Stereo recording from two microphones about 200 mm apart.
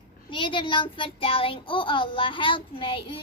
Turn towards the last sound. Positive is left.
turn(degrees=25)  # may be behind; listen again after turning